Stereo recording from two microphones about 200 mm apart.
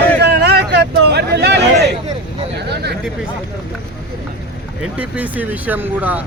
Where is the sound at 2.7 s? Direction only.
55° right (ahead or behind).